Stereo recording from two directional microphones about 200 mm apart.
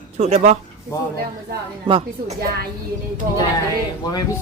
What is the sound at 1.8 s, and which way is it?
Speech, 25° right (ahead or behind).